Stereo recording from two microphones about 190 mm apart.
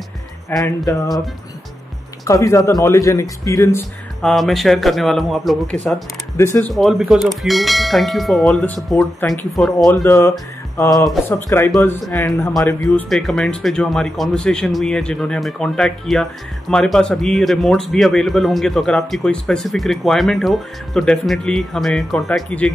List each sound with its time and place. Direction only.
0.5 s speech: centre (ahead or behind)
2.2 s speech: 15° left (ahead or behind)
4.2 s speech: centre (ahead or behind)
6.3 s speech: 15° left (ahead or behind)
6.7 s speech: centre (ahead or behind)
10.0 s speech: 15° left (ahead or behind)
12.8 s speech: centre (ahead or behind)